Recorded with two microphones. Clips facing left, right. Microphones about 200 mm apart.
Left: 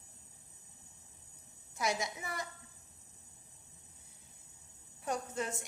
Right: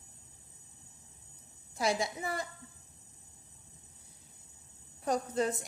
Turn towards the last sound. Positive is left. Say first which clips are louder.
# right 6 dB
turn(degrees=-35)  # may be behind; listen again after turning